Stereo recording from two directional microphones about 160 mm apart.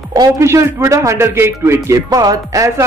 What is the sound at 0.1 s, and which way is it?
Speech, 20° right (ahead or behind).